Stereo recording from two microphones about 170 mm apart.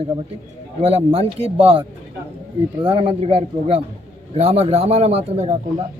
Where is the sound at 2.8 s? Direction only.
30° right (ahead or behind).